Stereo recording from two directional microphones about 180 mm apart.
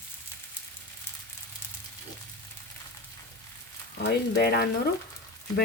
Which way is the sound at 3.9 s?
65° left (ahead or behind).